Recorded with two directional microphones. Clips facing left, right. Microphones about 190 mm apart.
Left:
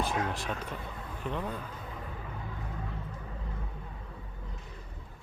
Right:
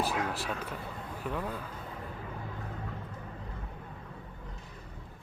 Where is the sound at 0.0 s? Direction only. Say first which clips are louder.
Even; 5° right (ahead or behind).